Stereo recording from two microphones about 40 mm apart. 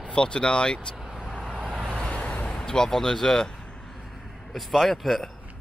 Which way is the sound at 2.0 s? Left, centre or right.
Left.